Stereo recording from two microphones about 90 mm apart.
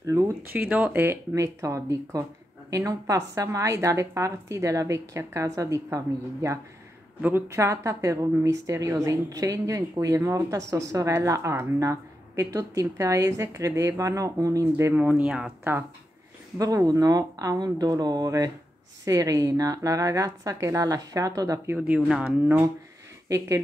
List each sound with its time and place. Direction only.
0.0 s speech: 35° right (ahead or behind)
0.4 s speech: 25° right (ahead or behind)
7.2 s speech: 20° right (ahead or behind)
15.0 s speech: 15° right (ahead or behind)
16.5 s speech: 40° right (ahead or behind)
21.7 s speech: 10° right (ahead or behind)
22.2 s speech: 20° right (ahead or behind)
23.2 s speech: 35° right (ahead or behind)